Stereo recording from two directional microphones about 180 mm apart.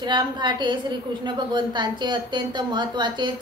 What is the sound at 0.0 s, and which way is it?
Speech, 25° right (ahead or behind).